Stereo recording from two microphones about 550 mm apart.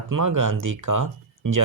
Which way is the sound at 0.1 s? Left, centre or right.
Right.